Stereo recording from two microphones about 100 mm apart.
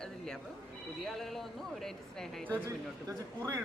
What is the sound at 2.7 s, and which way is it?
Speech, 30° right (ahead or behind).